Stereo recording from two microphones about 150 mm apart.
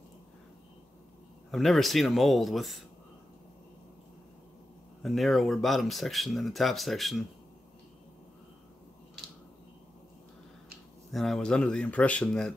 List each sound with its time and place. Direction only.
1.5 s speech: centre (ahead or behind)
5.0 s speech: centre (ahead or behind)
11.1 s speech: centre (ahead or behind)